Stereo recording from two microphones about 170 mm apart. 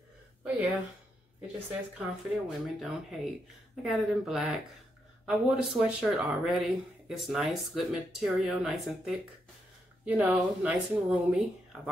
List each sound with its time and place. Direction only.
1.7 s speech: 5° right (ahead or behind)